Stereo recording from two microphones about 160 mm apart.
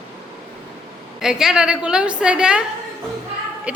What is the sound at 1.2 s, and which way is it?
A woman's voice, 5° right (ahead or behind).